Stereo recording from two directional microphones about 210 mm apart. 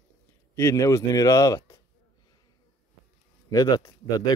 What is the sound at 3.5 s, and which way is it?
Speech, 20° left (ahead or behind).